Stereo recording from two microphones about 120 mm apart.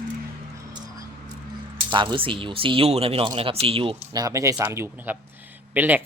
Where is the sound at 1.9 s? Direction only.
45° right (ahead or behind).